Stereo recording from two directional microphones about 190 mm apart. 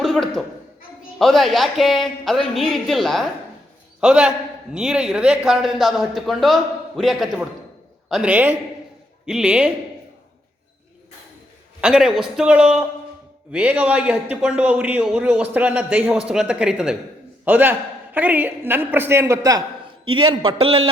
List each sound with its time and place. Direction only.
0.0 s a sound: centre (ahead or behind)
1.2 s a man's voice: centre (ahead or behind)
11.8 s a man's voice: 5° right (ahead or behind); by 20.9 s 25° right (ahead or behind)